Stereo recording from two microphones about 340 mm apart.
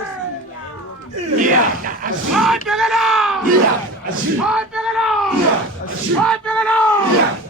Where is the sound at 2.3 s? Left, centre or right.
Centre.